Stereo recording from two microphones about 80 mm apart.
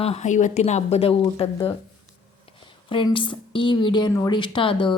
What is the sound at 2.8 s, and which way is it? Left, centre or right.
Speech, left.